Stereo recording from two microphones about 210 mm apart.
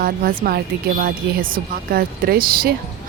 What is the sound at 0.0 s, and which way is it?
Speech, 45° right (ahead or behind).